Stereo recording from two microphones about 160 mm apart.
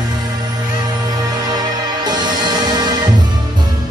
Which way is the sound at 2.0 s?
25° right (ahead or behind).